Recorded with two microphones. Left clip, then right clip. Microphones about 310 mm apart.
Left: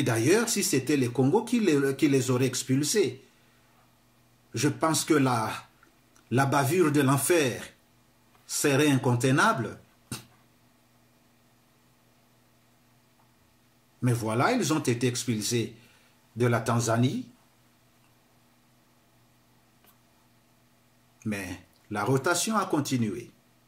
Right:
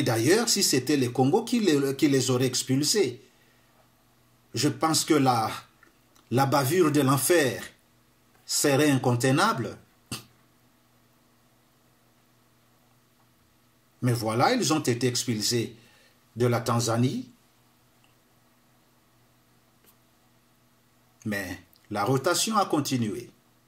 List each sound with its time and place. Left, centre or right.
0.0 s speech: centre
4.5 s speech: centre
8.5 s speech: centre
14.0 s speech: centre
21.2 s speech: centre